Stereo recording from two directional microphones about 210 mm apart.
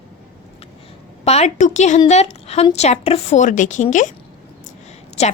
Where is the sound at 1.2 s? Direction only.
30° left (ahead or behind).